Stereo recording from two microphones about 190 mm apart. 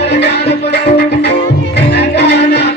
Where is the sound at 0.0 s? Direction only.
60° left (ahead or behind).